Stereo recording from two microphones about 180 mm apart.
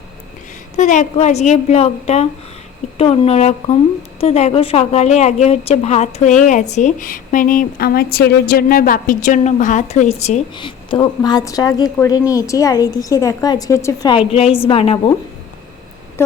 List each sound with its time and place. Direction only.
0.8 s a woman's voice: 40° left (ahead or behind)
10.5 s a woman's voice: 25° left (ahead or behind)
14.3 s a woman's voice: 35° left (ahead or behind)